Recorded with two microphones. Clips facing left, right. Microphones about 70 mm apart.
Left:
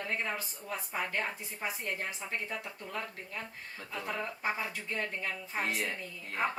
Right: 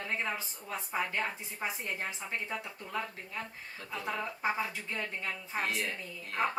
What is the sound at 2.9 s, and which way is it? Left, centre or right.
A woman's voice, centre.